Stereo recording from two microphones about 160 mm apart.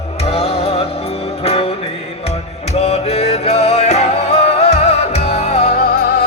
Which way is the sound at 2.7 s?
40° left (ahead or behind).